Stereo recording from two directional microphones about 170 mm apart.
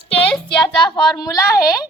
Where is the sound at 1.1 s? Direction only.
20° left (ahead or behind).